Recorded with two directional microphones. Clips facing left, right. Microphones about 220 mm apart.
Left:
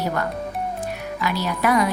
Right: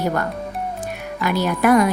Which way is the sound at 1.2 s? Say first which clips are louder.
Right 5 dB; 50° right (ahead or behind).